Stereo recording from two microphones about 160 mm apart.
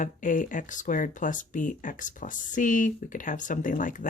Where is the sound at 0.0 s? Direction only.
55° left (ahead or behind).